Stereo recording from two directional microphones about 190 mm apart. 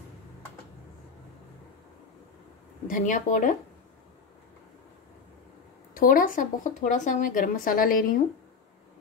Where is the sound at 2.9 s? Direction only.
45° left (ahead or behind).